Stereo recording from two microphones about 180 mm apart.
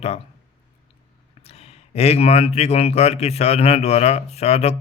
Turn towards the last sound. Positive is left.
turn(degrees=35)  # may be behind; listen again after turning